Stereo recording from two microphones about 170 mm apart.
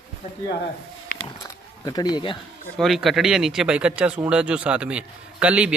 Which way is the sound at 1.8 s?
25° left (ahead or behind).